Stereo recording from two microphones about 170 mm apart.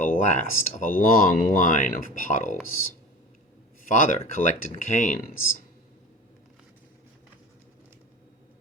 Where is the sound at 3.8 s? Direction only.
50° left (ahead or behind).